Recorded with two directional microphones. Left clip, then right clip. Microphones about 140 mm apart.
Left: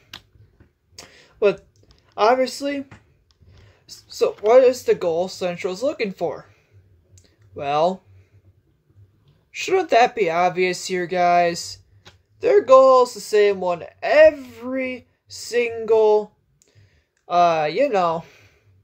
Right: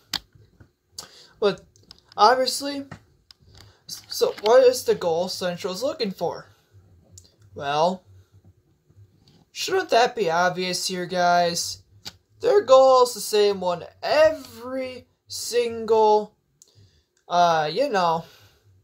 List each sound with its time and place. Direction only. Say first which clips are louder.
0.9 s a sound: left 3 dB; 15° left (ahead or behind)
3.9 s speech: left 2 dB; 20° left (ahead or behind)
7.2 s clicking: left 3 dB; 20° left (ahead or behind)
9.6 s speech: left 3 dB; 20° left (ahead or behind)